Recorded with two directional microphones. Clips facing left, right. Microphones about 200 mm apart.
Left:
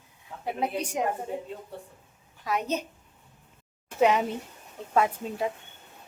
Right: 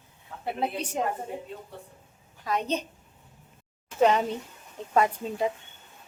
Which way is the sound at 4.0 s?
10° left (ahead or behind).